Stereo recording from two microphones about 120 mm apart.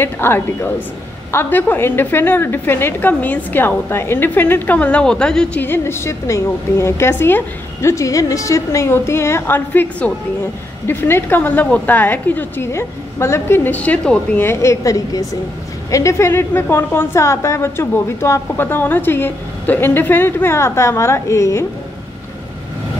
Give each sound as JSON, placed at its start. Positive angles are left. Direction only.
{"t": 0.0, "sound": "a woman's voice", "side_deg": 20}